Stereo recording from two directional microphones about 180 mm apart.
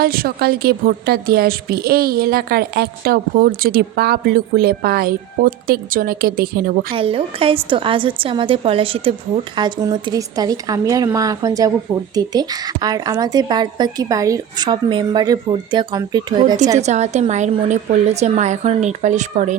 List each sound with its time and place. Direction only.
0.0 s a woman's voice: 55° right (ahead or behind)
6.9 s a woman's voice: 30° right (ahead or behind)
16.8 s speech: 40° right (ahead or behind)